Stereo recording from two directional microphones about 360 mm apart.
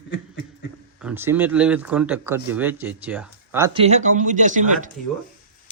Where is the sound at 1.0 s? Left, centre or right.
Centre.